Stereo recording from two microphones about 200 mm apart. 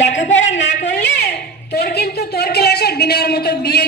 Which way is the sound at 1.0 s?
50° left (ahead or behind).